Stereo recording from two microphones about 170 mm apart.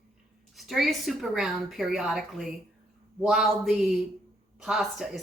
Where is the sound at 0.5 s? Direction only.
Centre (ahead or behind).